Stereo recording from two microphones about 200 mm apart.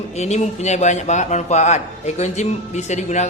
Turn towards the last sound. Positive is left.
turn(degrees=35)  # may be behind; listen again after turning